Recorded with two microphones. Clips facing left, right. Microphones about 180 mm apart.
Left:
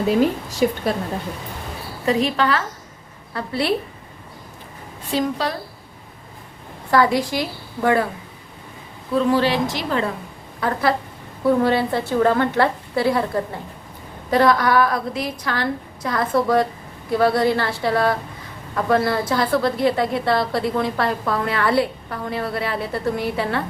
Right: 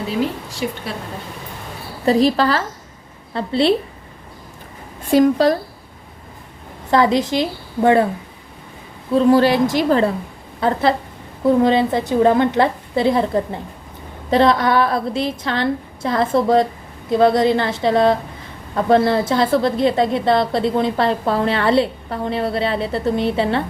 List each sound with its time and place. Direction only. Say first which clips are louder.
0.6 s a woman's voice: left 5 dB; 45° left (ahead or behind)
2.0 s a woman's voice: right 4 dB; 35° right (ahead or behind)
5.1 s a woman's voice: right 9 dB; 45° right (ahead or behind)
6.9 s a woman's voice: right 2 dB; 20° right (ahead or behind)
9.1 s a woman's voice: right 5 dB; 40° right (ahead or behind)
10.6 s a woman's voice: right 3 dB; 25° right (ahead or behind)